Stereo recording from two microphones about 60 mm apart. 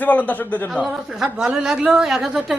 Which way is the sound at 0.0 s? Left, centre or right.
Left.